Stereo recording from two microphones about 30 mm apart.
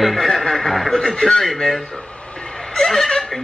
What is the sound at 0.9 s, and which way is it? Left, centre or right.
Speech, centre.